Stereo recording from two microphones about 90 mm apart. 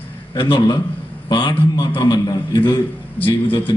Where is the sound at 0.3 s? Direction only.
75° left (ahead or behind).